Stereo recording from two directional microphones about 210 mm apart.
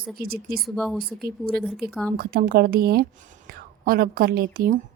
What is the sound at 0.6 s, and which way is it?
Speech, centre (ahead or behind).